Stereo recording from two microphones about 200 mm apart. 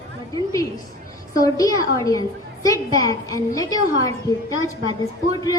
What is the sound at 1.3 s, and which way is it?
A woman's voice, 15° left (ahead or behind).